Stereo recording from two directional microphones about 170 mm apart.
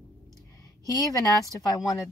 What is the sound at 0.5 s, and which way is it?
A woman's voice, 20° left (ahead or behind).